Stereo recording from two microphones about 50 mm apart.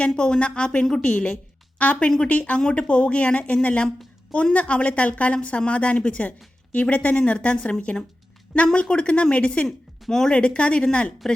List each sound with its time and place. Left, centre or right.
0.0 s a woman's voice: centre
9.6 s speech: centre